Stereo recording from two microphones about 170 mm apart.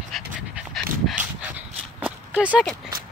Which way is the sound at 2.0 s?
5° right (ahead or behind).